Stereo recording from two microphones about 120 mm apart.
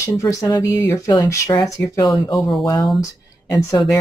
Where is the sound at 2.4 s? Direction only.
Centre (ahead or behind).